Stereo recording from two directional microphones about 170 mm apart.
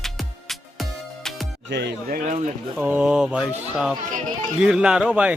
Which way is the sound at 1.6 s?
90° right.